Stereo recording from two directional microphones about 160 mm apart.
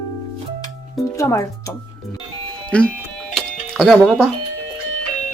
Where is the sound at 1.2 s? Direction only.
20° left (ahead or behind).